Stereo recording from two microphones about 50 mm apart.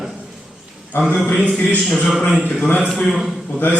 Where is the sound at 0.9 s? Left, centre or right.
Left.